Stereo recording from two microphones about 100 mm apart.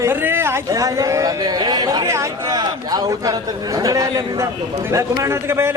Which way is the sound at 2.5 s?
45° right (ahead or behind).